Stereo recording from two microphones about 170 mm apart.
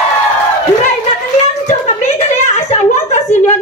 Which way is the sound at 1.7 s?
40° left (ahead or behind).